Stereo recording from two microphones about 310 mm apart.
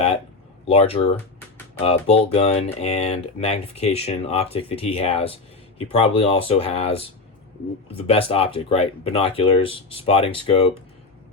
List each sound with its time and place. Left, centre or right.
0.7 s speech: centre